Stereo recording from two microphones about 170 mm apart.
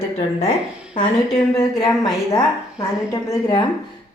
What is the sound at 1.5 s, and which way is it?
Speech, 20° left (ahead or behind).